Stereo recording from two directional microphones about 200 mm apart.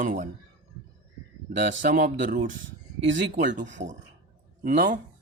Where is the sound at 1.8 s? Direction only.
45° right (ahead or behind).